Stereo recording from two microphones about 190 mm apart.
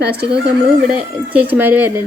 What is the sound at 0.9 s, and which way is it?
A woman's voice, 10° right (ahead or behind).